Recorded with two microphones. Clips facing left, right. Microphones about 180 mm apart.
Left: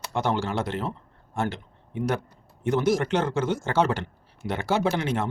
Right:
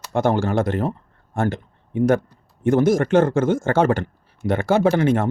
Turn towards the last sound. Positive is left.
turn(degrees=-50)  # may be behind; listen again after turning